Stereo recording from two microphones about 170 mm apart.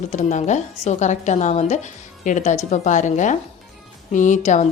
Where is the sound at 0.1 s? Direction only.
45° left (ahead or behind).